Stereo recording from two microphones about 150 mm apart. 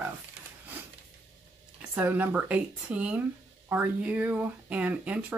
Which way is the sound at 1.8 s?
10° right (ahead or behind).